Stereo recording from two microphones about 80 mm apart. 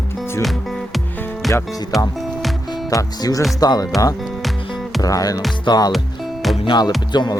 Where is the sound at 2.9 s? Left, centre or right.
Left.